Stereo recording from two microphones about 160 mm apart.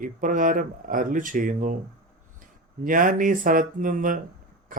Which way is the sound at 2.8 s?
60° right (ahead or behind).